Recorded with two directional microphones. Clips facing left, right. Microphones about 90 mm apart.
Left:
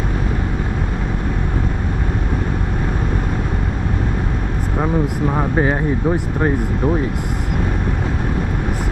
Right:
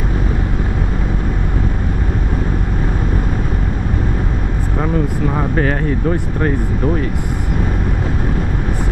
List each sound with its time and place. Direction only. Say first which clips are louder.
4.7 s speech: even; 10° left (ahead or behind)